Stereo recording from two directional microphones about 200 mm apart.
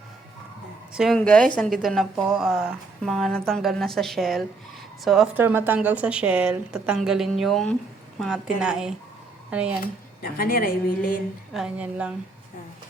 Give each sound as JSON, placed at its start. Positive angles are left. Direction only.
{"t": 0.9, "sound": "a woman's voice", "side_deg": 0}
{"t": 9.8, "sound": "speech", "side_deg": 50}
{"t": 11.5, "sound": "a woman's voice", "side_deg": -5}